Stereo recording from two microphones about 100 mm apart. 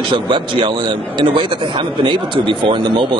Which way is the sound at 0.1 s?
55° right (ahead or behind).